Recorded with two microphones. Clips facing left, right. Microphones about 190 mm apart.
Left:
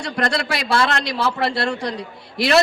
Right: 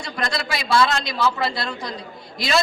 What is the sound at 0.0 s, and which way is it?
A man's voice, 70° left (ahead or behind).